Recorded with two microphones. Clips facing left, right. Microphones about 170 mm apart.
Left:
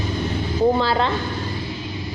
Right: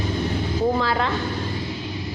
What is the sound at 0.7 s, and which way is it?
Speech, 30° left (ahead or behind).